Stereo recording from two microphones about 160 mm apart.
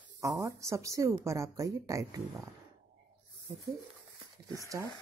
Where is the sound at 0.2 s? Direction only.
20° right (ahead or behind).